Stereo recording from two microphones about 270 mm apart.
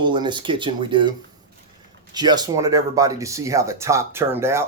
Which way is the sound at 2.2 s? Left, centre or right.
Centre.